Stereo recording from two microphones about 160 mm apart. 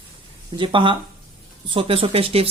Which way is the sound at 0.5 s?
30° right (ahead or behind).